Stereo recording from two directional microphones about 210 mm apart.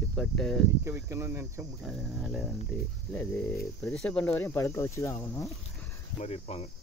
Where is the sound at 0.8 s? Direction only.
15° right (ahead or behind).